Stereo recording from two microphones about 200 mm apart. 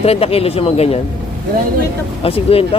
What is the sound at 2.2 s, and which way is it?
Speech, 30° left (ahead or behind).